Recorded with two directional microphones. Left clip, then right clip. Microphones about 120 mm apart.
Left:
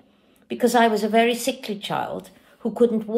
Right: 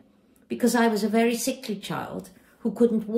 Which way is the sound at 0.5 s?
25° left (ahead or behind).